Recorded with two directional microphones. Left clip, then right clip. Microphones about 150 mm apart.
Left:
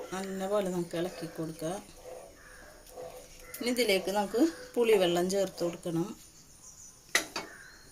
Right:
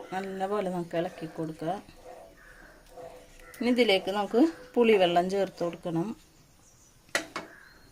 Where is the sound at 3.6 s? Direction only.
60° right (ahead or behind).